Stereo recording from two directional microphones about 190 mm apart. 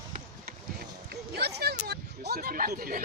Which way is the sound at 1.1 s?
55° right (ahead or behind).